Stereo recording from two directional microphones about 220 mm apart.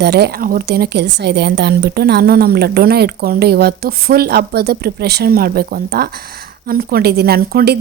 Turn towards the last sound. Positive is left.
turn(degrees=-45)  # may be behind; listen again after turning